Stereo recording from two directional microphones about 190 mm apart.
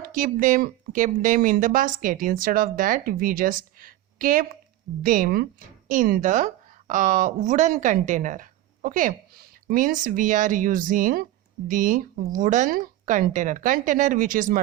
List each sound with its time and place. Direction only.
0.1 s speech: 45° right (ahead or behind)